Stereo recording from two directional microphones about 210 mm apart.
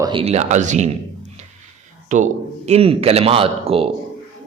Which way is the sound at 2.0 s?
35° right (ahead or behind).